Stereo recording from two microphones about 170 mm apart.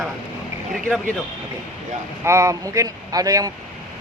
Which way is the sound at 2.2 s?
15° right (ahead or behind).